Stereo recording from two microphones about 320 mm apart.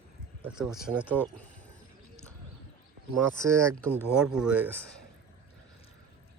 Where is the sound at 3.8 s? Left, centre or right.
Centre.